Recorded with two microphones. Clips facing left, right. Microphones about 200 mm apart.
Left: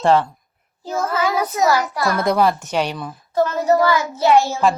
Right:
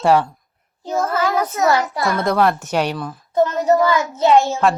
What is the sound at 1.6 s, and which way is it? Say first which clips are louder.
Speech: even; 25° right (ahead or behind).